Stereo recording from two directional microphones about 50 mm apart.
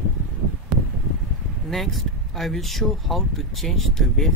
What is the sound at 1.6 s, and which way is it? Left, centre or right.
Speech, centre.